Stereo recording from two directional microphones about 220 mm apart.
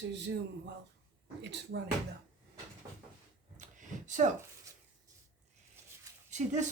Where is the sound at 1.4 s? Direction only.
50° right (ahead or behind).